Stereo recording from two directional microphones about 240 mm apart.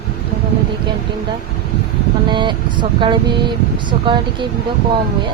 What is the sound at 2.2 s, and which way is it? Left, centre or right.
Vehicle, centre.